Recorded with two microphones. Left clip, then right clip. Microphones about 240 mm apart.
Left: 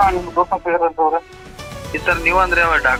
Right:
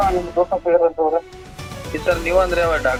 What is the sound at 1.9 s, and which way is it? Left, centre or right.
Speech, centre.